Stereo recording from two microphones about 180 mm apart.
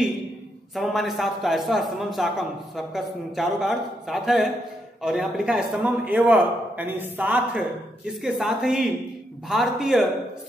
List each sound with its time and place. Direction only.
0.7 s a man's voice: centre (ahead or behind)